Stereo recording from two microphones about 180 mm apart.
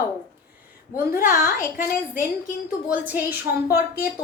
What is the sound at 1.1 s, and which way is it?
Speech, 50° left (ahead or behind).